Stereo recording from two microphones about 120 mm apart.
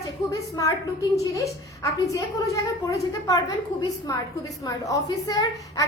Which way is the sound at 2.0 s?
25° left (ahead or behind).